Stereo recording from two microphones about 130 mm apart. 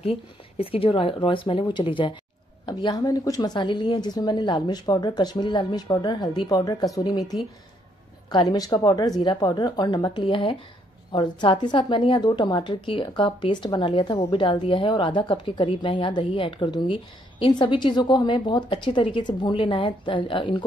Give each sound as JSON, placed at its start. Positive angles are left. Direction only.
{"t": 0.0, "sound": "a woman's voice", "side_deg": 45}
{"t": 8.3, "sound": "a woman's voice", "side_deg": 35}